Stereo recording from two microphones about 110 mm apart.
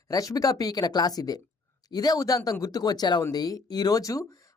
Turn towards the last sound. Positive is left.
turn(degrees=30)  # may be behind; listen again after turning